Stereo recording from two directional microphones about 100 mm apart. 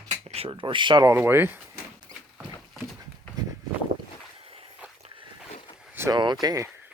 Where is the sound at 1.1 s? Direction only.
25° right (ahead or behind).